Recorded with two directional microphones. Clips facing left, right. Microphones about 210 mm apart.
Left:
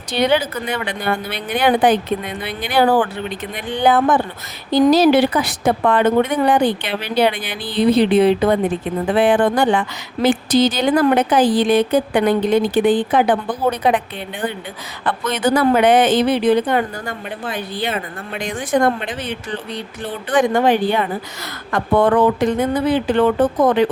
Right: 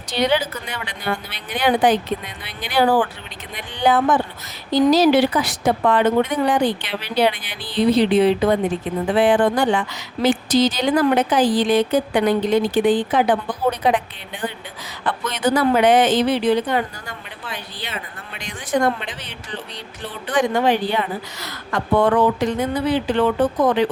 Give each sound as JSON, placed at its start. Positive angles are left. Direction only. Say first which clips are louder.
{"t": 0.1, "sound": "a woman's voice", "louder": "left 3 dB", "side_deg": 55}
{"t": 15.0, "sound": "a woman's voice", "louder": "left 2 dB", "side_deg": 55}